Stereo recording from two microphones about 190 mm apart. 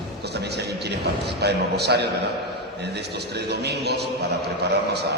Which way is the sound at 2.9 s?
60° right (ahead or behind).